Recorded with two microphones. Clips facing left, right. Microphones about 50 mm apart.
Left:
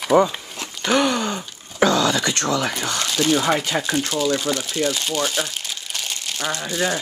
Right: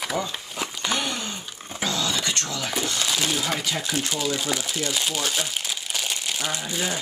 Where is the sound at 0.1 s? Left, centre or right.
Left.